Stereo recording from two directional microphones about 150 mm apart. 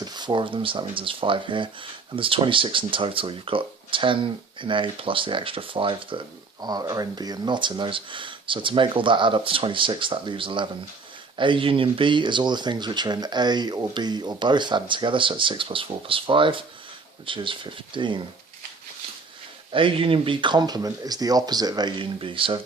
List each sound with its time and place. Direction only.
0.0 s speech: 30° right (ahead or behind)
19.7 s speech: 35° right (ahead or behind)